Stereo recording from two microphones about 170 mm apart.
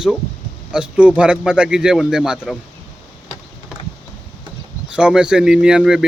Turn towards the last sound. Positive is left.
turn(degrees=-5)  # may be behind; listen again after turning